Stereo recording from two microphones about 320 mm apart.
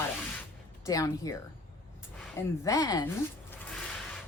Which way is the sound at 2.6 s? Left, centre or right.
Centre.